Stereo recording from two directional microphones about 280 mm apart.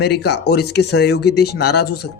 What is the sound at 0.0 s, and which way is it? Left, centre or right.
Speech, left.